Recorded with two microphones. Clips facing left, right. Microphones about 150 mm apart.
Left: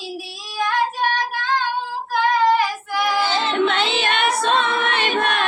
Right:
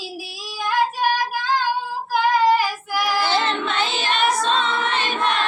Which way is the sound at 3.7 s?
60° left (ahead or behind).